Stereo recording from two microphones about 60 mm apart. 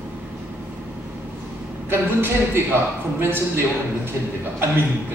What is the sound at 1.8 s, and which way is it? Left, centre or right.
Speech, right.